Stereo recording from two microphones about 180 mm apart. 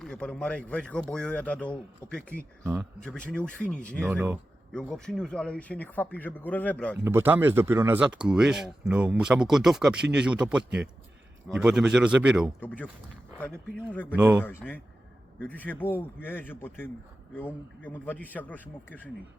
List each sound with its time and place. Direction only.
0.0 s speech: 5° left (ahead or behind)
4.1 s speech: 10° right (ahead or behind)
4.7 s speech: 5° left (ahead or behind)
6.9 s speech: 10° right (ahead or behind)
12.5 s speech: 10° left (ahead or behind)
13.9 s speech: 10° left (ahead or behind)
14.2 s speech: 15° right (ahead or behind)
14.4 s speech: 10° left (ahead or behind)